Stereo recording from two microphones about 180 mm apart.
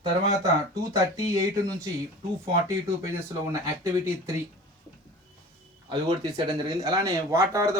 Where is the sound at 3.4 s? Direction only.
15° right (ahead or behind).